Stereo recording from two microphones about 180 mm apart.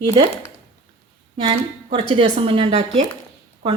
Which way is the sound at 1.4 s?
30° right (ahead or behind).